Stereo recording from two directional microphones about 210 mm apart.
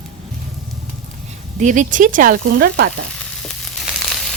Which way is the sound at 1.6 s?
40° right (ahead or behind).